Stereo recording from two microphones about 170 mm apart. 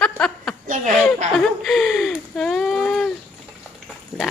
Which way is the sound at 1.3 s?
Centre (ahead or behind).